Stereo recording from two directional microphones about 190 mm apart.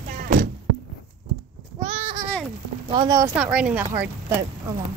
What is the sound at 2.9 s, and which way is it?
Speech, 20° right (ahead or behind).